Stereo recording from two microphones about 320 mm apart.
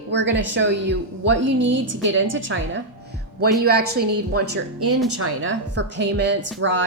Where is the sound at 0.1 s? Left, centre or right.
Right.